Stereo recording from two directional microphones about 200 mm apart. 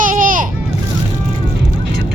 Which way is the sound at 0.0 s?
40° right (ahead or behind).